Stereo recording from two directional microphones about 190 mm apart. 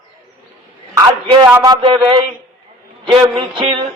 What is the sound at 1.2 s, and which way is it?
A man's voice, 25° right (ahead or behind).